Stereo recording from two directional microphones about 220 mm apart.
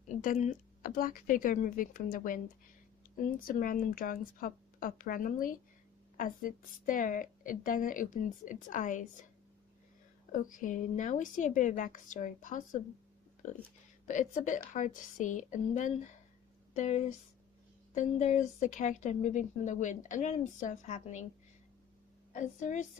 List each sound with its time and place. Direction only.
0.1 s a woman's voice: 35° left (ahead or behind)
10.3 s a woman's voice: 35° left (ahead or behind)
14.1 s a woman's voice: 35° left (ahead or behind)
22.3 s a woman's voice: 35° left (ahead or behind)